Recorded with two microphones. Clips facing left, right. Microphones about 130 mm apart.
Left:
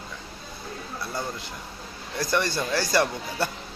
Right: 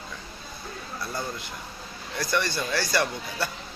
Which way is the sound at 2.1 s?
40° left (ahead or behind).